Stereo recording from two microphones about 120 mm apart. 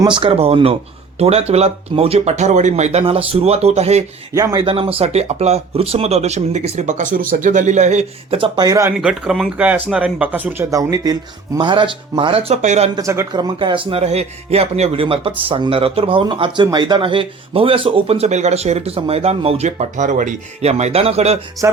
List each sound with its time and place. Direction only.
0.1 s speech: 50° right (ahead or behind); by 3.0 s 70° right (ahead or behind)
3.0 s speech: 50° right (ahead or behind)
4.4 s a man's voice: 25° right (ahead or behind)
4.6 s speech: 50° right (ahead or behind); by 6.6 s 70° right (ahead or behind)
6.7 s speech: 90° right; by 8.4 s 70° right (ahead or behind)
8.4 s speech: 35° right (ahead or behind)
9.0 s speech: 5° right (ahead or behind)
10.7 s speech: 30° right (ahead or behind); by 12.5 s 50° right (ahead or behind)
12.6 s speech: 70° right (ahead or behind)
13.0 s a man's voice: 25° right (ahead or behind)
13.3 s speech: 40° right (ahead or behind)
14.0 s speech: 60° right (ahead or behind)
21.6 s speech: 25° right (ahead or behind)